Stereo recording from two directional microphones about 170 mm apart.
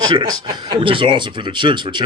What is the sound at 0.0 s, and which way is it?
Speech, 25° right (ahead or behind).